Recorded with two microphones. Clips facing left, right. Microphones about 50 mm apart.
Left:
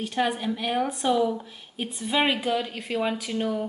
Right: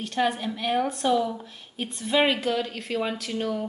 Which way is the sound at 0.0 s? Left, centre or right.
Centre.